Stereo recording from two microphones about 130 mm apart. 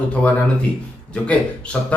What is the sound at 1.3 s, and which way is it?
Speech, 10° left (ahead or behind).